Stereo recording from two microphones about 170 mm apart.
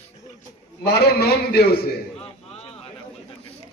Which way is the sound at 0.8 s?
70° left (ahead or behind).